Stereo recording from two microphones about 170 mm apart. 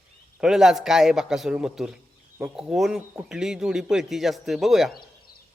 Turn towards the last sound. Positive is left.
turn(degrees=0)  # may be behind; listen again after turning